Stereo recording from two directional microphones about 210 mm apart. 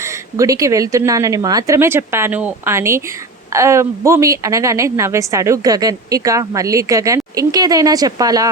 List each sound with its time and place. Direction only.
0.0 s a woman's voice: 15° right (ahead or behind)